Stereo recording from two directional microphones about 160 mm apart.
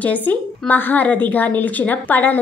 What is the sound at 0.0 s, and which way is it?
A woman's voice, 10° left (ahead or behind).